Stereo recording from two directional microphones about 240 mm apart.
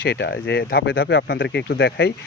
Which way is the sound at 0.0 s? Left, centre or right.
Left.